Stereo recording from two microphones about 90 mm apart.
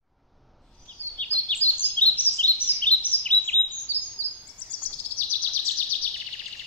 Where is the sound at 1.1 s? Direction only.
20° left (ahead or behind).